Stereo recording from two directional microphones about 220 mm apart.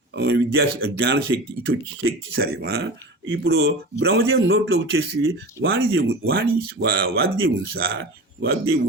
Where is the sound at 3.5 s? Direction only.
60° right (ahead or behind).